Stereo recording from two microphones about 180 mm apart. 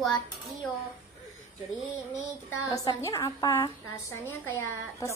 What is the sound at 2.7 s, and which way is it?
A woman's voice, 20° left (ahead or behind).